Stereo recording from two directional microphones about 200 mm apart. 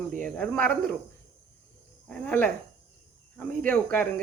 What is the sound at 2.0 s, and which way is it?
Speech, 5° left (ahead or behind).